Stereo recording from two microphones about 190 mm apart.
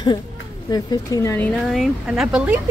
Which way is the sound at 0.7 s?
20° left (ahead or behind).